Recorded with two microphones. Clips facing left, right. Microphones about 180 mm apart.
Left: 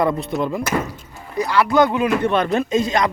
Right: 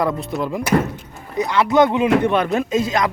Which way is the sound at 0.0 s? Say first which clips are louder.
Left 1 dB; centre (ahead or behind).